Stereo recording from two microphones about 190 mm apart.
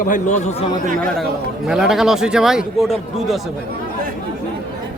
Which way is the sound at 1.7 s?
Centre (ahead or behind).